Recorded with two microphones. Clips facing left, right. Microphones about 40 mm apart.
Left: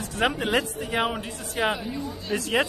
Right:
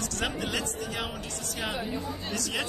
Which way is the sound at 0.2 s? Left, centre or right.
Left.